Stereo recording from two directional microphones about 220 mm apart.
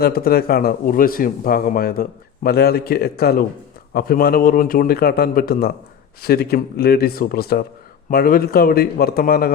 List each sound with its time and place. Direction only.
0.0 s speech: 45° left (ahead or behind)